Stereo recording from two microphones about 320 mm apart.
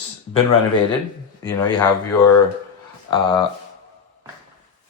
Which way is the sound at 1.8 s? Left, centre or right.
Centre.